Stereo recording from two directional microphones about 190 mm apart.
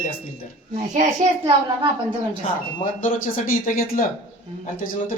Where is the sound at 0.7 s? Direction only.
40° right (ahead or behind).